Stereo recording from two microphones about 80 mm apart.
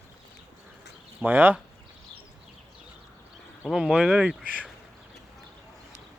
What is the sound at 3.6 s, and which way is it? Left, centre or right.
Speech, centre.